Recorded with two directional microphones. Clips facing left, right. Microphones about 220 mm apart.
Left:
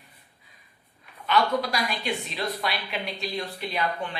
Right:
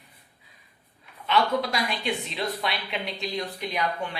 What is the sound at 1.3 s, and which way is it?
A woman's voice, 25° right (ahead or behind).